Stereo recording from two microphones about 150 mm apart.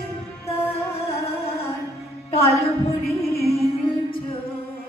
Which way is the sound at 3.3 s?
40° left (ahead or behind).